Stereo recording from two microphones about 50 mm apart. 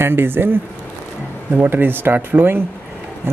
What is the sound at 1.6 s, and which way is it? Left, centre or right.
Speech, right.